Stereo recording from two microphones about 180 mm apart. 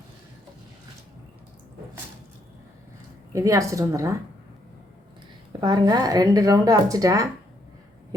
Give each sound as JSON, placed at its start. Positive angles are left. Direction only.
{"t": 3.3, "sound": "speech", "side_deg": -15}
{"t": 5.5, "sound": "a woman's voice", "side_deg": -25}